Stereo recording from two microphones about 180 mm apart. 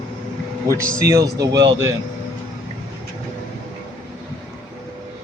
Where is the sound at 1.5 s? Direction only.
85° right.